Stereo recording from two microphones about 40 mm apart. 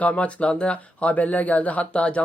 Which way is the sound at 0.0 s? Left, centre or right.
Left.